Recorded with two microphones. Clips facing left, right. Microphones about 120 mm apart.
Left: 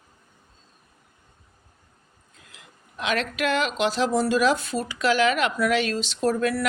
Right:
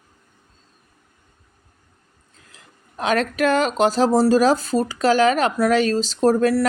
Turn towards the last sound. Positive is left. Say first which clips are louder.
# right 7 dB
turn(degrees=-35)  # may be behind; listen again after turning